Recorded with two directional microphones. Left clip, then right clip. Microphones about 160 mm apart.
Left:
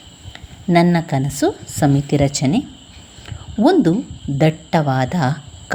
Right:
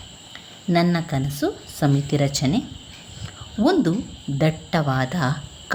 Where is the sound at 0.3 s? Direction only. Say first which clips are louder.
Left 6 dB; 25° left (ahead or behind).